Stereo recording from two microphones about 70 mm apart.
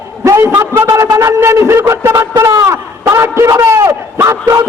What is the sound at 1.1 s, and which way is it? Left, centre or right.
A man's voice, right.